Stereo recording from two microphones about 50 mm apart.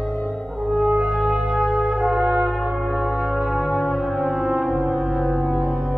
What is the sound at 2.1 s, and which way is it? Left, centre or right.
Brass instrument, centre.